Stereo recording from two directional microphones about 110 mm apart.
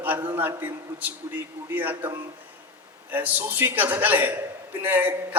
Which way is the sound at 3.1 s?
15° right (ahead or behind).